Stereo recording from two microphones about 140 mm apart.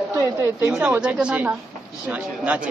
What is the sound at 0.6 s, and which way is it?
A woman's voice, 5° right (ahead or behind).